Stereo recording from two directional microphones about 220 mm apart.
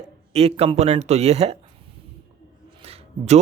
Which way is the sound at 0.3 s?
25° right (ahead or behind).